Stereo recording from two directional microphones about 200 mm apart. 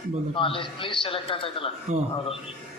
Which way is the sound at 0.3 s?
25° left (ahead or behind).